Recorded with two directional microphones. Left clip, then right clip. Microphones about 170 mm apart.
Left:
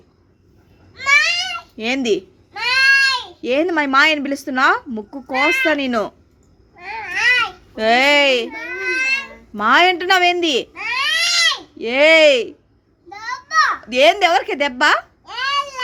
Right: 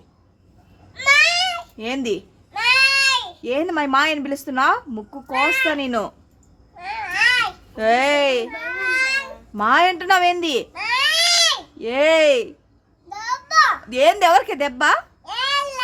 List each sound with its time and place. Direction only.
0.9 s babbling: 15° right (ahead or behind)
1.7 s a woman's voice: 5° left (ahead or behind)
2.5 s cat: 15° right (ahead or behind)
3.4 s a woman's voice: centre (ahead or behind)
6.7 s babbling: 15° right (ahead or behind)
7.8 s a woman's voice: centre (ahead or behind)
8.7 s a sound: 15° right (ahead or behind)
9.6 s a woman's voice: centre (ahead or behind)
10.8 s baby cry: 15° right (ahead or behind)
11.8 s a woman's voice: centre (ahead or behind)
13.1 s a sound: 15° right (ahead or behind)
13.8 s a woman's voice: centre (ahead or behind)
14.2 s a woman's voice: 10° right (ahead or behind)
15.2 s a sound: 15° right (ahead or behind)